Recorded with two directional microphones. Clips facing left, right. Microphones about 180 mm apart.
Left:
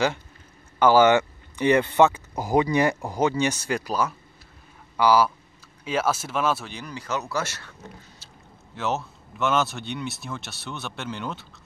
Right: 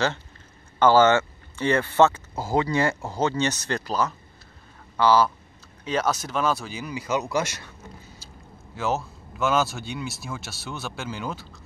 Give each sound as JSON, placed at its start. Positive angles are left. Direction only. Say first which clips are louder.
{"t": 0.7, "sound": "speech", "louder": "even", "side_deg": 10}
{"t": 8.7, "sound": "speech", "louder": "right 1 dB", "side_deg": 0}